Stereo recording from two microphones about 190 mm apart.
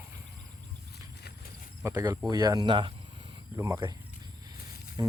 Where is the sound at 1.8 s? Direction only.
20° right (ahead or behind).